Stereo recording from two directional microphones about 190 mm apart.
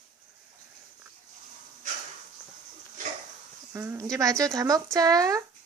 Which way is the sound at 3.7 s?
15° right (ahead or behind).